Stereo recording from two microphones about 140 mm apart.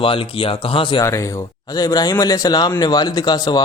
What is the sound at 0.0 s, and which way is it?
Speech, 40° left (ahead or behind).